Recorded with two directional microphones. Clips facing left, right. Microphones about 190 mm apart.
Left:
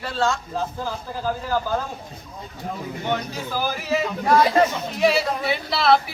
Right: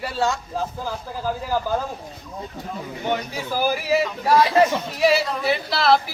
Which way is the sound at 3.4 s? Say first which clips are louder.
Right 3 dB; 10° right (ahead or behind).